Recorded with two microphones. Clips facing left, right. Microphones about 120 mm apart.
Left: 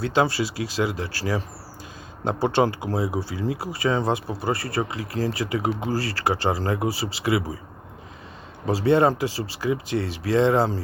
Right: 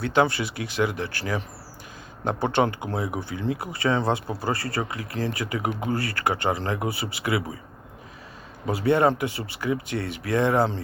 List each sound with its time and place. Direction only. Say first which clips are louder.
0.2 s speech: even; 25° left (ahead or behind)
8.6 s speech: left 2 dB; 30° left (ahead or behind)